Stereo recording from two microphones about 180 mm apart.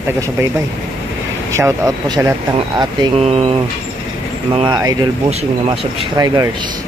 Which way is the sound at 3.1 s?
35° right (ahead or behind).